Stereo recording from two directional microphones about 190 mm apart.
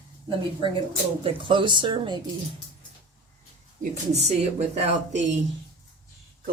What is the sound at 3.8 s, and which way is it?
Speech, 35° right (ahead or behind).